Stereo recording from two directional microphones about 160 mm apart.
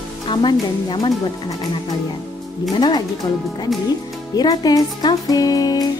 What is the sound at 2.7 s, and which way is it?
Music, 25° left (ahead or behind).